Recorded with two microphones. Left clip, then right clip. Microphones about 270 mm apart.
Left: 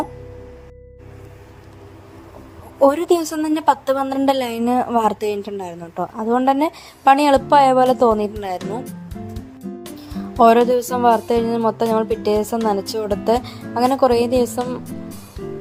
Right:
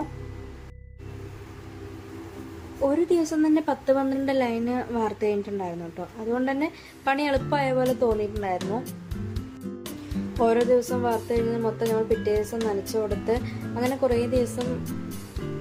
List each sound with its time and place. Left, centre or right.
2.8 s a woman's voice: left
10.4 s a woman's voice: left